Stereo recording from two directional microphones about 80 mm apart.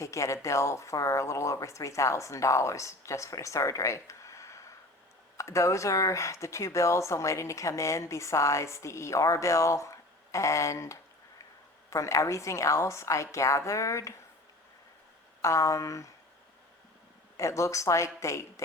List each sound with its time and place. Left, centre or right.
0.0 s speech: left
15.4 s speech: left
17.3 s speech: left